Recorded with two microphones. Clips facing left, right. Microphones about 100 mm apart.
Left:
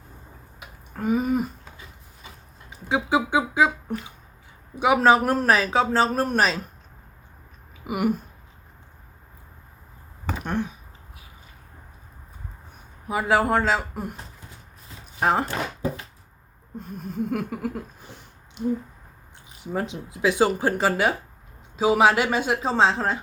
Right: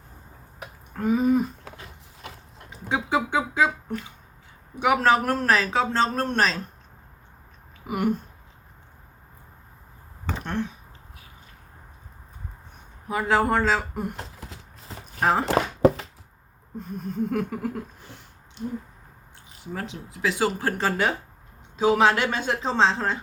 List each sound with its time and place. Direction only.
0.9 s speech: 5° left (ahead or behind)
1.6 s mechanisms: 70° right (ahead or behind)
2.6 s speech: 5° left (ahead or behind)
7.9 s speech: 10° left (ahead or behind)
10.2 s a sound: 10° left (ahead or behind)
13.1 s speech: 10° left (ahead or behind)
14.2 s a sound: 85° right
15.2 s speech: centre (ahead or behind)
15.4 s a sound: 90° right
16.7 s speech: centre (ahead or behind)
18.0 s a sound: 15° left (ahead or behind)
19.6 s speech: 20° left (ahead or behind)